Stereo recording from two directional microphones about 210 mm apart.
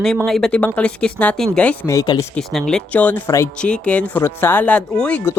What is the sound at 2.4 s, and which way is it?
Speech, centre (ahead or behind).